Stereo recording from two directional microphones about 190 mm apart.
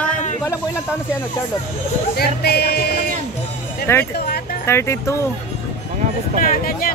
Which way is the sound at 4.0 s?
55° left (ahead or behind).